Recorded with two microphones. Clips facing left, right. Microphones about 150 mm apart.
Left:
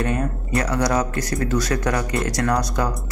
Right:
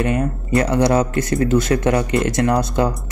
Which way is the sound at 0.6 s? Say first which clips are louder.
Right 5 dB; 25° right (ahead or behind).